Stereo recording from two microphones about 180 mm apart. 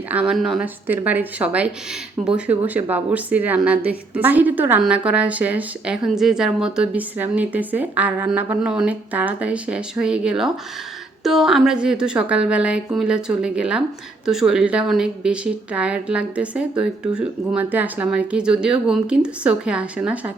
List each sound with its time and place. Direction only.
0.1 s a woman's voice: 5° right (ahead or behind)